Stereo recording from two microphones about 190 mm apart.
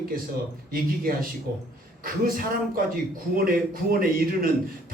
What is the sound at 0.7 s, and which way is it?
A man's voice, 50° right (ahead or behind).